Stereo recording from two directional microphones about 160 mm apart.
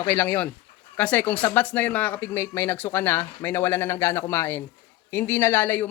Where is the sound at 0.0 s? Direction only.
10° left (ahead or behind).